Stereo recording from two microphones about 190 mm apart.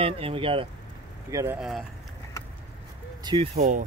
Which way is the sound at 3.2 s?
25° right (ahead or behind).